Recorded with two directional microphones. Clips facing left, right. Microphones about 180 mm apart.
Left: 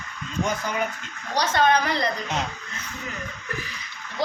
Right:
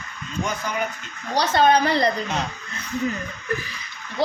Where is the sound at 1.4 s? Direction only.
30° right (ahead or behind).